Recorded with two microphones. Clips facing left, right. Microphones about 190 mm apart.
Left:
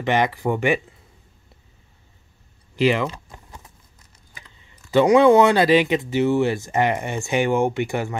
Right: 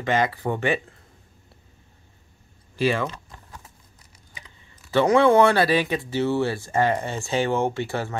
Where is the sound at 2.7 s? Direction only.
15° left (ahead or behind).